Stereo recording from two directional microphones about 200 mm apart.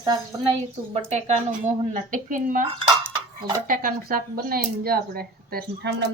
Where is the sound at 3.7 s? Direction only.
45° right (ahead or behind).